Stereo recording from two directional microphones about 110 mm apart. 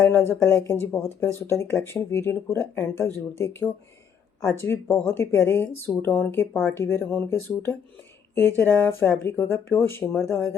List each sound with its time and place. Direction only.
0.0 s speech: 20° left (ahead or behind)